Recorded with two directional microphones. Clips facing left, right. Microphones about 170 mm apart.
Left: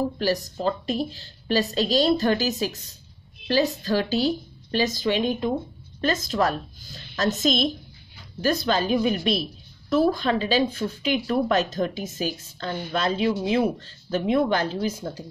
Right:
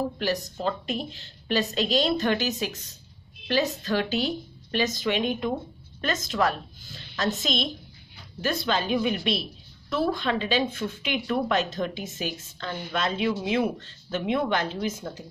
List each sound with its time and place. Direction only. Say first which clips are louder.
0.2 s a woman's voice: left 3 dB; 35° left (ahead or behind)